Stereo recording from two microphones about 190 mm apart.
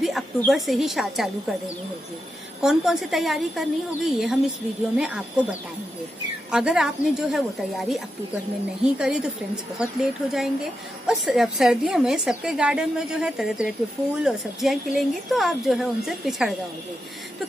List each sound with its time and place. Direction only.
0.0 s a woman's voice: centre (ahead or behind)
2.6 s a woman's voice: centre (ahead or behind)